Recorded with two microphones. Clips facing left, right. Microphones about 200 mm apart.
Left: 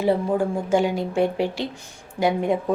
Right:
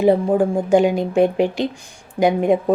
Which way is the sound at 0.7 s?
15° right (ahead or behind).